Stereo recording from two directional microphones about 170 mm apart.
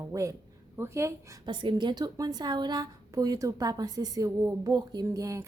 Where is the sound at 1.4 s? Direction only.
30° right (ahead or behind).